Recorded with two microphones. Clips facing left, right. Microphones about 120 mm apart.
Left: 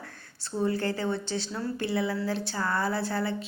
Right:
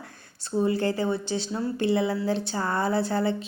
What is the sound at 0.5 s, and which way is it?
A woman's voice, 15° right (ahead or behind).